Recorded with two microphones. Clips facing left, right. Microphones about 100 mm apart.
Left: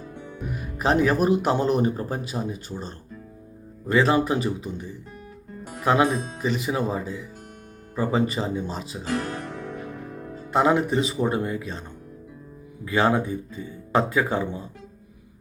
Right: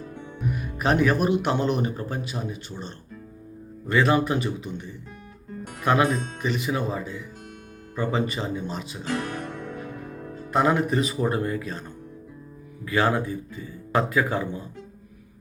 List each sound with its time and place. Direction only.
0.5 s speech: 30° left (ahead or behind)
9.3 s music: 45° right (ahead or behind)
10.1 s speech: 35° left (ahead or behind)
12.8 s speech: 20° left (ahead or behind)